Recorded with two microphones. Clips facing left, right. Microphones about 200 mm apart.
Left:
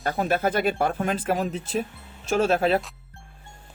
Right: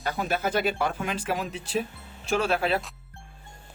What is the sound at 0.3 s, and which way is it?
Speech, 50° left (ahead or behind).